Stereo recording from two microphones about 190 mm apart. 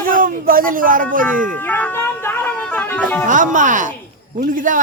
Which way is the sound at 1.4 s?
10° left (ahead or behind).